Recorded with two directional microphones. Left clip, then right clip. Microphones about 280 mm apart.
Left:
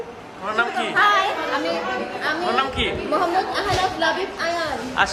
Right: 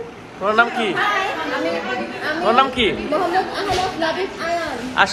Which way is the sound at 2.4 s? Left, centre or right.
Centre.